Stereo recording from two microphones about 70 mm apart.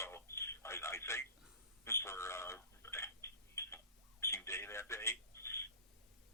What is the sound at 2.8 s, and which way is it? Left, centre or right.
Tick-tock, left.